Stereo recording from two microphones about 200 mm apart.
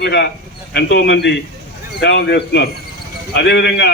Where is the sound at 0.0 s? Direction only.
55° left (ahead or behind).